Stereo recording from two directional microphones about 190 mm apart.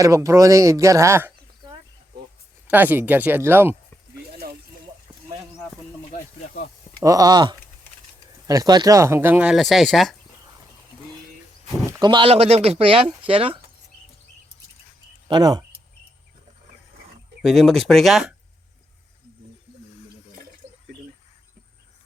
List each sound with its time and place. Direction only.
0.0 s speech: 15° right (ahead or behind)
7.0 s speech: 20° right (ahead or behind); by 10.2 s centre (ahead or behind)
11.9 s speech: 20° right (ahead or behind)
15.3 s speech: 20° right (ahead or behind)
17.4 s speech: centre (ahead or behind)